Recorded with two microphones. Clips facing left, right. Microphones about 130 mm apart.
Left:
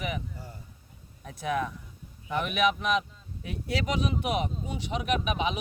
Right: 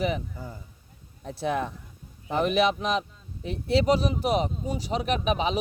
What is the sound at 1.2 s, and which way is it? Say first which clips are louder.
Speech: right 2 dB; 30° right (ahead or behind).